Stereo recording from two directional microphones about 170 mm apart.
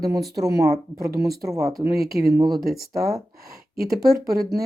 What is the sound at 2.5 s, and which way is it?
Speech, 60° right (ahead or behind).